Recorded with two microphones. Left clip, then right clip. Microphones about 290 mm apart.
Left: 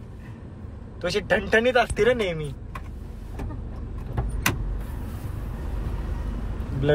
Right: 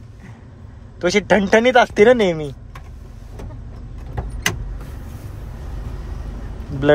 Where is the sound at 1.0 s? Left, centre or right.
Right.